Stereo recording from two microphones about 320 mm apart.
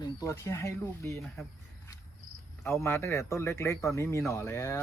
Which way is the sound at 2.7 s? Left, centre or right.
Centre.